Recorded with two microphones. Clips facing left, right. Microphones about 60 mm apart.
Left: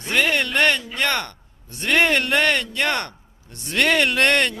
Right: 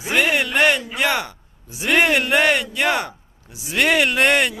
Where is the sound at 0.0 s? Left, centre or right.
Centre.